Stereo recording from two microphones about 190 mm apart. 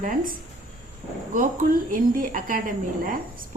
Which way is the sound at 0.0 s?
45° right (ahead or behind).